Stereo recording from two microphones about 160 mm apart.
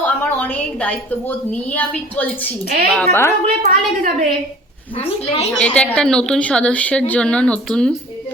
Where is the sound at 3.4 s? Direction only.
70° right (ahead or behind).